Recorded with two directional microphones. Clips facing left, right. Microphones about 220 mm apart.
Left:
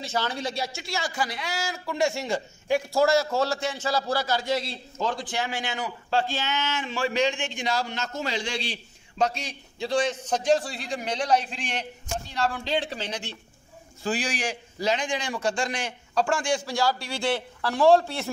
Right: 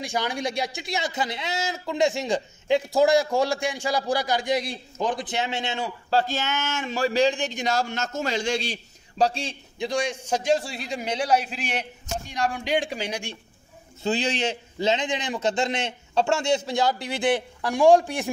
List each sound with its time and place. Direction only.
0.0 s speech: 15° right (ahead or behind); by 8.7 s 45° right (ahead or behind)
9.2 s a man's voice: 30° right (ahead or behind)
9.8 s a man's voice: 15° right (ahead or behind)
14.0 s speech: 25° right (ahead or behind)